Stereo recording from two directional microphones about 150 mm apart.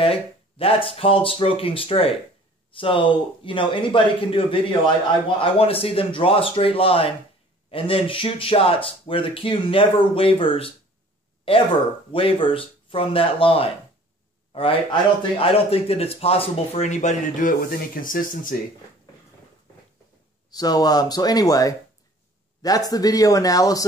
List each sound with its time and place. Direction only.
0.0 s a man's voice: 40° left (ahead or behind); by 18.6 s 65° left (ahead or behind)
20.4 s speech: 25° left (ahead or behind)